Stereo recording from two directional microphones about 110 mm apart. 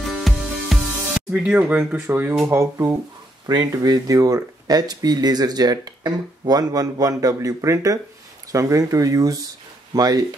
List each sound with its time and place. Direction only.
0.1 s music: centre (ahead or behind)
1.3 s speech: 10° right (ahead or behind); by 10.2 s 35° right (ahead or behind)